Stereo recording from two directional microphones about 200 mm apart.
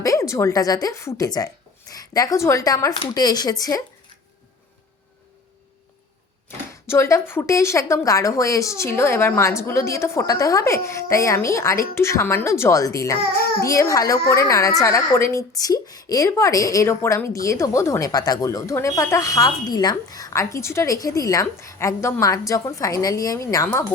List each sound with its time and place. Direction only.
0.0 s a woman's voice: 15° left (ahead or behind)
6.5 s a sound: 10° left (ahead or behind)
6.8 s a woman's voice: 15° left (ahead or behind)